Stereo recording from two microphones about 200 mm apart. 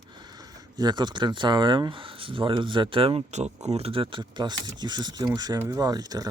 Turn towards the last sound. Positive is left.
turn(degrees=-20)  # may be behind; listen again after turning